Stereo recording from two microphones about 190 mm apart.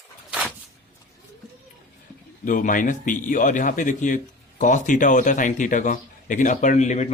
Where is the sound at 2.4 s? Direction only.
45° left (ahead or behind).